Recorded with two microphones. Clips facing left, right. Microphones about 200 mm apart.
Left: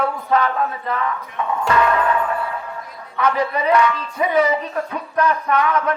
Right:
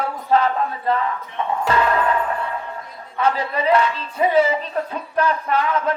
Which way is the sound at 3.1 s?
30° right (ahead or behind).